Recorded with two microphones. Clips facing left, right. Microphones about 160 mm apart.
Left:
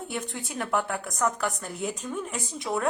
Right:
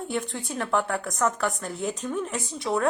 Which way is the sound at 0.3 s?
20° left (ahead or behind).